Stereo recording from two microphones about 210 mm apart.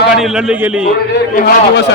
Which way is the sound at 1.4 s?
45° left (ahead or behind).